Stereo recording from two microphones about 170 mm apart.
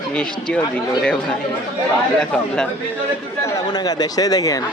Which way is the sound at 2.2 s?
5° left (ahead or behind).